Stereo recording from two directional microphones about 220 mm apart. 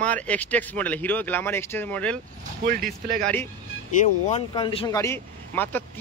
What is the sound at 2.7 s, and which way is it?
Speech, 40° right (ahead or behind).